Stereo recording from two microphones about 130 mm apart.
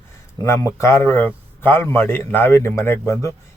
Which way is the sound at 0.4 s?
20° left (ahead or behind).